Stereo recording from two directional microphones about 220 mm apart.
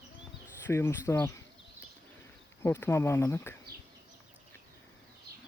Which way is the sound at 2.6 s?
10° left (ahead or behind).